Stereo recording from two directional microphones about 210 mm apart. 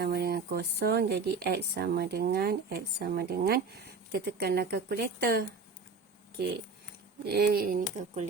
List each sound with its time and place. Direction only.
0.0 s speech: 50° right (ahead or behind)
7.3 s speech: 50° right (ahead or behind)